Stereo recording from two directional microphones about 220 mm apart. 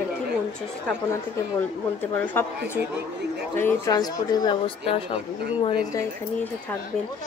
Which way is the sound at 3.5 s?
15° left (ahead or behind).